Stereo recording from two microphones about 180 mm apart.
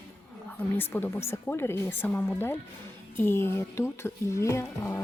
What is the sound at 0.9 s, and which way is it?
Speech, 10° left (ahead or behind).